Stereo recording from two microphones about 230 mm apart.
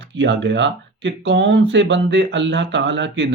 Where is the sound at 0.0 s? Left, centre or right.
Right.